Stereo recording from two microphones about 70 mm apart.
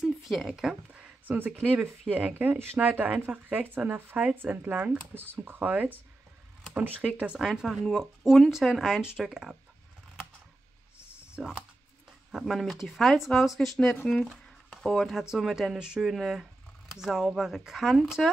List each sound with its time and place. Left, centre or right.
0.0 s speech: centre
0.9 s speech: right
7.0 s speech: centre
7.8 s speech: centre
11.4 s speech: centre